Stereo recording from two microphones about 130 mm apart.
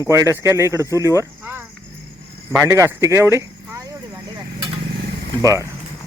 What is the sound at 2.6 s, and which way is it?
Speech, 20° right (ahead or behind).